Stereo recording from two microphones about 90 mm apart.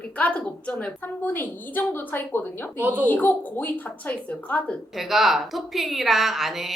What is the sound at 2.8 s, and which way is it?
Speech, 20° right (ahead or behind).